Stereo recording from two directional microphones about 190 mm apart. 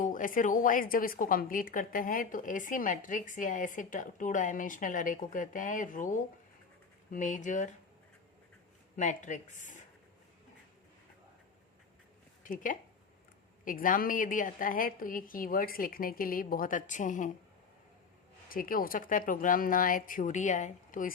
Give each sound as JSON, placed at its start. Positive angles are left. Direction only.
{"t": 0.0, "sound": "a woman's voice", "side_deg": 45}
{"t": 9.0, "sound": "speech", "side_deg": 40}
{"t": 12.4, "sound": "a woman's voice", "side_deg": 45}
{"t": 18.4, "sound": "a woman's voice", "side_deg": 50}